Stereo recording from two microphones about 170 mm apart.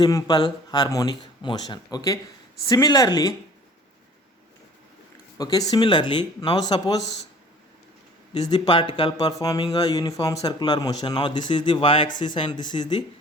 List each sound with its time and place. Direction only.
0.0 s speech: 20° left (ahead or behind)
5.4 s speech: 20° left (ahead or behind)
8.3 s speech: 25° left (ahead or behind)